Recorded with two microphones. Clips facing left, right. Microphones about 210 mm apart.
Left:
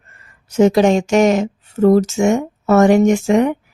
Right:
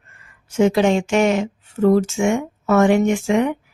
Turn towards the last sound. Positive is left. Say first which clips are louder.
# left 4 dB
turn(degrees=45)  # may be behind; listen again after turning